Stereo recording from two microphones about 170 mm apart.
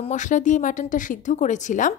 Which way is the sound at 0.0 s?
45° left (ahead or behind).